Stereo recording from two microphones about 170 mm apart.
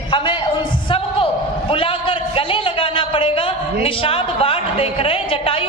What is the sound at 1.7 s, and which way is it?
Speech, 30° left (ahead or behind).